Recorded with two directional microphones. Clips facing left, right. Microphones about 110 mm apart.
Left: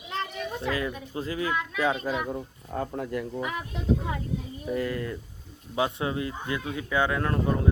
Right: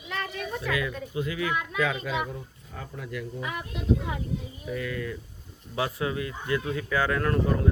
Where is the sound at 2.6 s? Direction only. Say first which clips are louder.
Left 9 dB; 45° left (ahead or behind).